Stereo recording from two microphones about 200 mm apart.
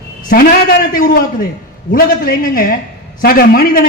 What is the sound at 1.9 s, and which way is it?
A man's voice, 45° left (ahead or behind).